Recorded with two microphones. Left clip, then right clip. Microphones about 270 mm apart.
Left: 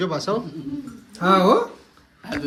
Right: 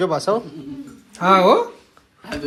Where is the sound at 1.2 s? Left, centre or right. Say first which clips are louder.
Right 3 dB; centre.